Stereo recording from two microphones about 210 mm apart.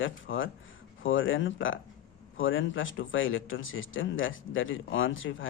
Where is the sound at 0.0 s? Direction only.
65° left (ahead or behind).